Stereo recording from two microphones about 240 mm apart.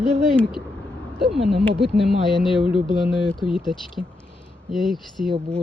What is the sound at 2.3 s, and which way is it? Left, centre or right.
Speech, left.